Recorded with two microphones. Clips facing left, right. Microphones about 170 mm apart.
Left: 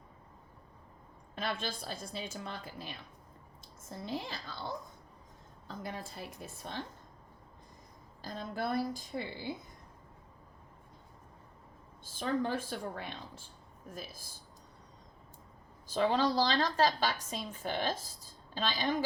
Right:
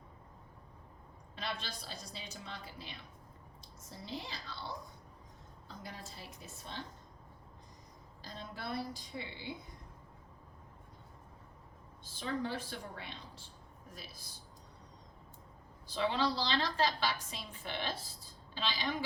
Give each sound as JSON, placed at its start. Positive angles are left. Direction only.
{"t": 1.4, "sound": "a woman's voice", "side_deg": 50}
{"t": 5.8, "sound": "a woman's voice", "side_deg": 55}
{"t": 8.2, "sound": "a woman's voice", "side_deg": 50}
{"t": 12.0, "sound": "a woman's voice", "side_deg": 50}
{"t": 15.9, "sound": "a woman's voice", "side_deg": 45}